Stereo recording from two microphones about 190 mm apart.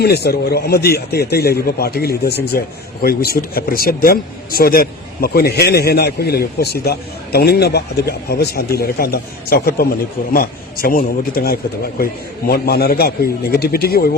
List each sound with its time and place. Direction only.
0.0 s a man's voice: 60° left (ahead or behind)